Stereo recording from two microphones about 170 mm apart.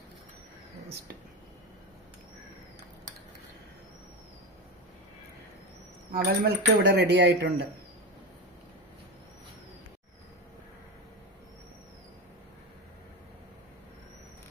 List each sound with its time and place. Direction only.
6.1 s speech: 60° right (ahead or behind); by 7.5 s 90° right